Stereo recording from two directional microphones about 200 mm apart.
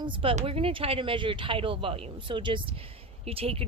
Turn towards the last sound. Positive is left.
turn(degrees=-30)  # may be behind; listen again after turning